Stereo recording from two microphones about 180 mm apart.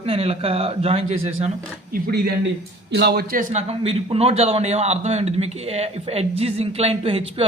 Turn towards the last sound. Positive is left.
turn(degrees=-30)  # may be behind; listen again after turning